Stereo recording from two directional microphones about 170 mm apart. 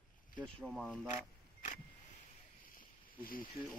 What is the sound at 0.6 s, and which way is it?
Speech, centre (ahead or behind).